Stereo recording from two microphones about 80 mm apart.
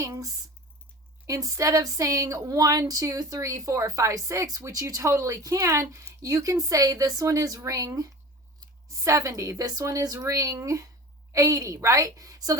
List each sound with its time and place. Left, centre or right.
0.0 s speech: right